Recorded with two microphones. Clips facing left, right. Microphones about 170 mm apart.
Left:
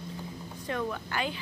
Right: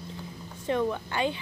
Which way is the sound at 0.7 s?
20° right (ahead or behind).